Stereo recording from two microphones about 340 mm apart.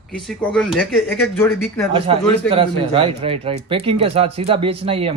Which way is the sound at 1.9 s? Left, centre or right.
Centre.